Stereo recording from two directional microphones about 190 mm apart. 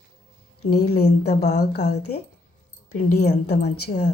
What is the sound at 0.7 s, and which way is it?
Speech, 55° left (ahead or behind).